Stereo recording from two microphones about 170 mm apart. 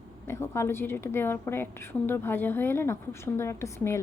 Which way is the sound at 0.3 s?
15° left (ahead or behind).